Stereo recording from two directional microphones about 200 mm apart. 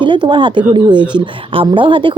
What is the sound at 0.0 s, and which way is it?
A woman's voice, 25° right (ahead or behind).